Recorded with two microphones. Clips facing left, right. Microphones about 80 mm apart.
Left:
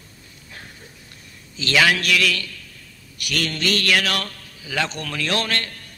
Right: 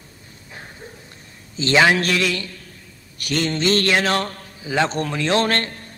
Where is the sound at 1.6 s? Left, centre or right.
Right.